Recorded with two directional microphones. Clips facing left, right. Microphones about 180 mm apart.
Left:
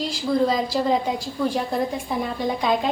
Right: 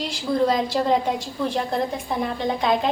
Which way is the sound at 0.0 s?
Centre (ahead or behind).